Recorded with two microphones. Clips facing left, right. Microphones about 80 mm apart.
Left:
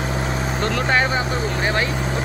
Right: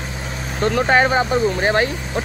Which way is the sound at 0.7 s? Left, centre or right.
Right.